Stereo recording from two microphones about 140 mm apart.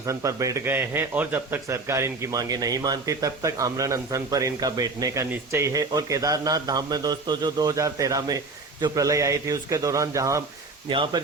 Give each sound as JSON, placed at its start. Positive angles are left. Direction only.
{"t": 0.0, "sound": "speech", "side_deg": -20}
{"t": 10.8, "sound": "speech", "side_deg": -35}